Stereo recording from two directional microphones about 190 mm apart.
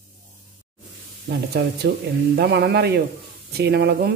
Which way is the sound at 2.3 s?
55° right (ahead or behind).